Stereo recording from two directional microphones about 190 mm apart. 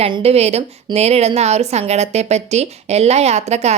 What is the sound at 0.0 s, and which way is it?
A woman's voice, 30° right (ahead or behind).